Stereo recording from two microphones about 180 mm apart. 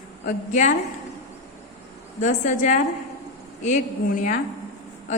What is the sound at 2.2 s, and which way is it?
Speech, 45° left (ahead or behind).